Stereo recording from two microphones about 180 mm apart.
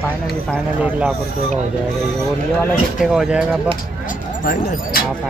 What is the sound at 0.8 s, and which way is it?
Speech, 10° right (ahead or behind).